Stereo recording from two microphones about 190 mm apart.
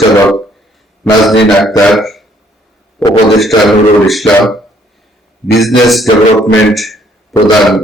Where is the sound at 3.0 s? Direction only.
10° left (ahead or behind).